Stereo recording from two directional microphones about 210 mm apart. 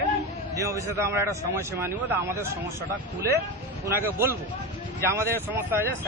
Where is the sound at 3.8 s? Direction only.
10° right (ahead or behind).